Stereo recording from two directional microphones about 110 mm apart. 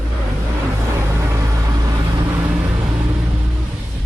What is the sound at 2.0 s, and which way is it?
Vehicle, 40° right (ahead or behind).